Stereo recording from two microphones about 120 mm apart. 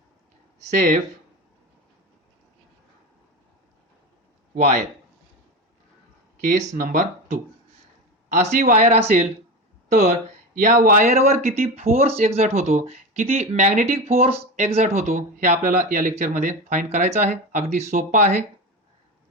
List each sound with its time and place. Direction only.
0.7 s speech: 90° right
4.5 s speech: 90° right
6.4 s speech: 85° right; by 9.2 s 65° right (ahead or behind)
9.9 s speech: 85° right